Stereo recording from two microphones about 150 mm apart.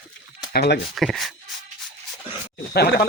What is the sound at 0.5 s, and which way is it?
Speech, 90° left.